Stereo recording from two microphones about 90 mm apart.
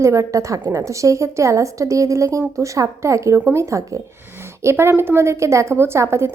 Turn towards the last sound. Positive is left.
turn(degrees=-30)  # may be behind; listen again after turning